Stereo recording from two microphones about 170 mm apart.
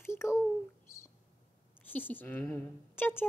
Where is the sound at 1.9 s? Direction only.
10° left (ahead or behind).